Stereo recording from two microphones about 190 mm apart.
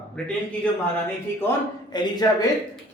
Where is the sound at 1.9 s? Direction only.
20° left (ahead or behind).